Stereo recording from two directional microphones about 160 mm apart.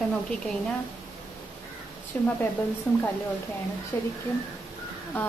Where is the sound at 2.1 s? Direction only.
10° left (ahead or behind).